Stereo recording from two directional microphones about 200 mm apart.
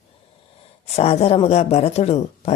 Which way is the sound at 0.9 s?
30° left (ahead or behind).